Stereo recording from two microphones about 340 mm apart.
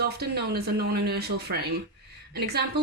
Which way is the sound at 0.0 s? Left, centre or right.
Right.